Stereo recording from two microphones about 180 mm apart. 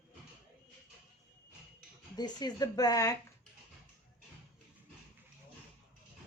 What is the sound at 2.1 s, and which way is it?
Speech, 20° left (ahead or behind).